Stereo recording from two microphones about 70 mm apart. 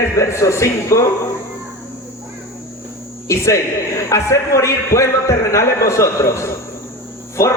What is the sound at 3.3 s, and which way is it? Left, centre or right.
A man's voice, left.